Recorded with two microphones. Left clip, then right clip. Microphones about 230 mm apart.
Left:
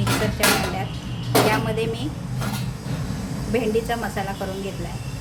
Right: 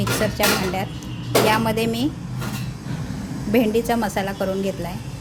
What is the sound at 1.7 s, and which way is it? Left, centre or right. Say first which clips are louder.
Speech: right 3 dB; right.